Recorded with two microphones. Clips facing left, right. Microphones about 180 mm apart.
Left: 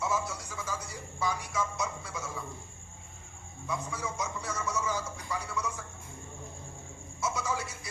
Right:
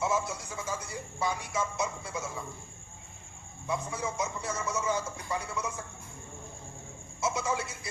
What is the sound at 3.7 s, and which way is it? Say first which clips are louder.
Speech: right 3 dB; 25° right (ahead or behind).